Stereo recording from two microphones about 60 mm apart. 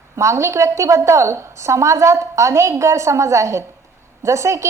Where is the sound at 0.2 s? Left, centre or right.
Right.